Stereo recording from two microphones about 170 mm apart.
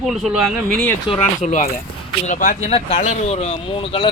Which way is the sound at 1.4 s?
45° left (ahead or behind).